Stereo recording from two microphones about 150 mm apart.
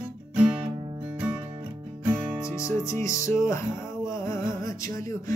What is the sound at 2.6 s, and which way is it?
Music, 20° left (ahead or behind).